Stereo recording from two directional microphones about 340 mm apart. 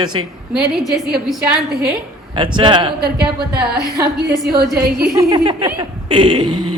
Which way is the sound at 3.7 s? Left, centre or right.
Right.